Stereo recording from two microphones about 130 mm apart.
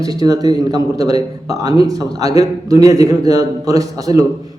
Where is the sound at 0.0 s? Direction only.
30° right (ahead or behind).